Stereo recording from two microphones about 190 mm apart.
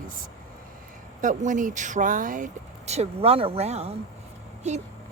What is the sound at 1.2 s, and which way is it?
Speech, 40° right (ahead or behind).